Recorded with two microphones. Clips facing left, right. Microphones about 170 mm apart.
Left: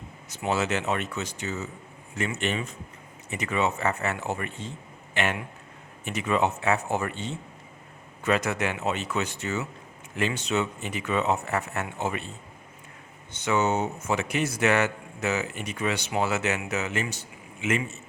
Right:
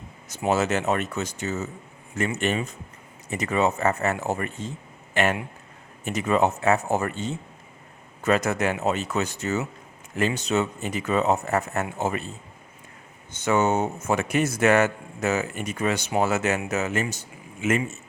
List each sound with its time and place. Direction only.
0.3 s a man's voice: 45° right (ahead or behind)
13.3 s a man's voice: 45° right (ahead or behind)